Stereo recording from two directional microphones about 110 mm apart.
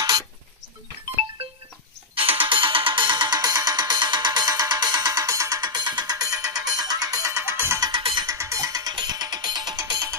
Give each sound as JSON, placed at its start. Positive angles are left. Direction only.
{"t": 2.1, "sound": "music", "side_deg": -55}
{"t": 8.0, "sound": "music", "side_deg": -50}
{"t": 8.3, "sound": "music", "side_deg": -30}